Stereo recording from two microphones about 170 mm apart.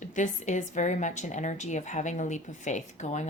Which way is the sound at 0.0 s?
45° left (ahead or behind).